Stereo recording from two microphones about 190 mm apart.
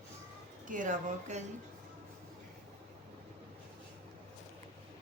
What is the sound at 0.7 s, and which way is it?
Speech, 40° right (ahead or behind).